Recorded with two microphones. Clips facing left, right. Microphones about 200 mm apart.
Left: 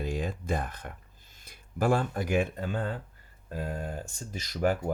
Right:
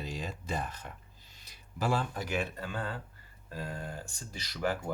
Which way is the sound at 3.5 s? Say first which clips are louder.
Left 5 dB; 50° left (ahead or behind).